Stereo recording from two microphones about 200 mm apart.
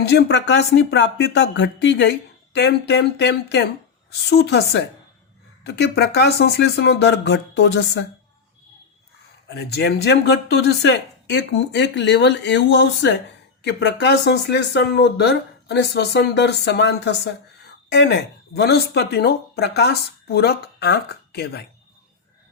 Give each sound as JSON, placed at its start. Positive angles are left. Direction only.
{"t": 0.1, "sound": "speech", "side_deg": 55}
{"t": 9.5, "sound": "a woman's voice", "side_deg": 55}